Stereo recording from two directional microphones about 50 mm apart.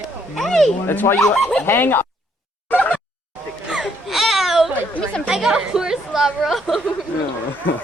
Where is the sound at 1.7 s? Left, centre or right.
Left.